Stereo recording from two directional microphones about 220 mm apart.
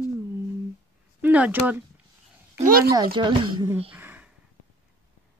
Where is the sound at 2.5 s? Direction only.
40° right (ahead or behind).